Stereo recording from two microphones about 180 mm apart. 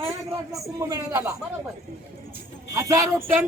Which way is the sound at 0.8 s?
20° right (ahead or behind).